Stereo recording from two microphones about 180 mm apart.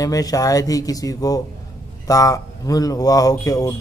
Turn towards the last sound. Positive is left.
turn(degrees=20)  # may be behind; listen again after turning